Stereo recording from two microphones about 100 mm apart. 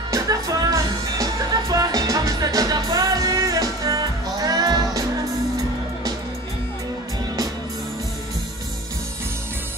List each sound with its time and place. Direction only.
0.1 s music: 35° right (ahead or behind)